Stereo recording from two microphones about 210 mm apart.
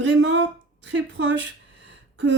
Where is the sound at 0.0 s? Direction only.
60° right (ahead or behind).